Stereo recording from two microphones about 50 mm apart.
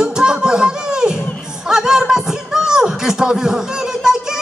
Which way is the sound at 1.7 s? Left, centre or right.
Centre.